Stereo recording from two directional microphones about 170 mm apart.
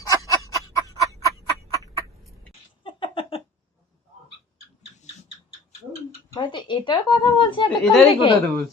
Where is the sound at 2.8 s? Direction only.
30° left (ahead or behind).